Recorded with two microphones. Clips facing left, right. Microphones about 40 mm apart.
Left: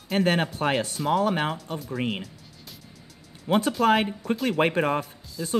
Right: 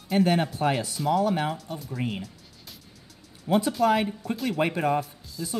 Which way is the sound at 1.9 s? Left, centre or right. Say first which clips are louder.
Left 3 dB; left.